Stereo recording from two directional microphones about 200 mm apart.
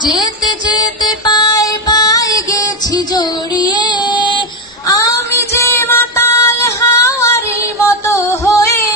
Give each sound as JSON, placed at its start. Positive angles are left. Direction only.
{"t": 0.0, "sound": "music", "side_deg": 20}